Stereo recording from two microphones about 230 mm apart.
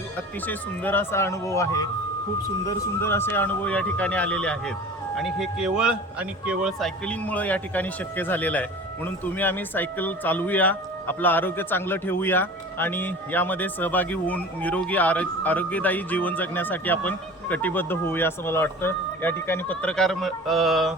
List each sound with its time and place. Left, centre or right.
0.4 s speech: centre